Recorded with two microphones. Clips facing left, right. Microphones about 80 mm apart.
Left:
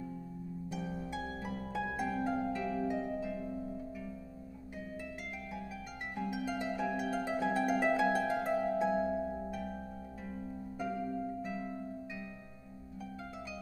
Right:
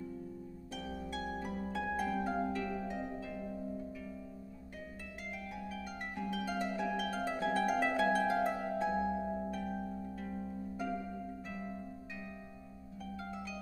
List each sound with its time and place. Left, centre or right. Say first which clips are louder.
0.7 s harp: left 2 dB; centre
6.1 s harp: left 1 dB; centre